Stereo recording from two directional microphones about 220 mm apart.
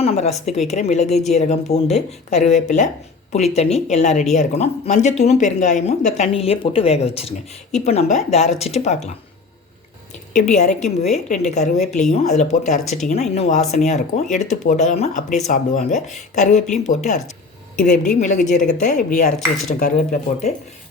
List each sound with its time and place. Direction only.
0.0 s a woman's voice: 30° left (ahead or behind)
10.5 s speech: 35° left (ahead or behind)